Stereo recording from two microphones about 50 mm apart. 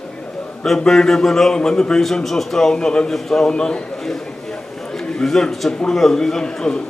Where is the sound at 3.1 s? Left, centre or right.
Centre.